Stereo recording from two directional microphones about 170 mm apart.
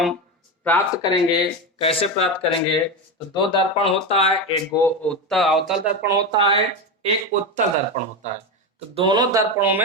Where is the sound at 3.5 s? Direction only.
35° left (ahead or behind).